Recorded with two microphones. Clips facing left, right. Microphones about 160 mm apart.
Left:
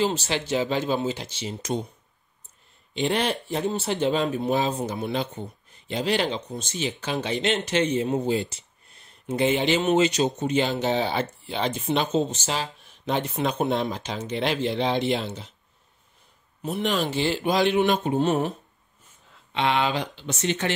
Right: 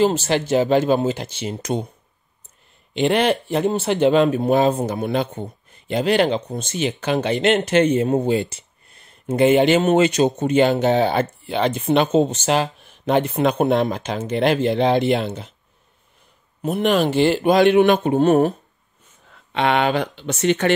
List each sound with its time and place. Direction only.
0.0 s speech: 50° right (ahead or behind)
2.9 s speech: 65° right (ahead or behind)
16.6 s speech: 55° right (ahead or behind)
19.5 s speech: 60° right (ahead or behind)